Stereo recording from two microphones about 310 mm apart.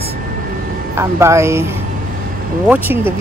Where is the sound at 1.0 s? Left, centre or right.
Centre.